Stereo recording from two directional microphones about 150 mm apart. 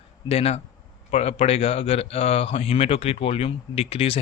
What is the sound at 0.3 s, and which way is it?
Speech, 40° left (ahead or behind).